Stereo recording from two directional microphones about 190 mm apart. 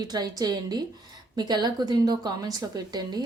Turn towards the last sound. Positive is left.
turn(degrees=-20)  # may be behind; listen again after turning